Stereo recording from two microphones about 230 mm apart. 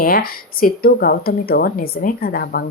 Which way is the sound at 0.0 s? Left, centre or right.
Left.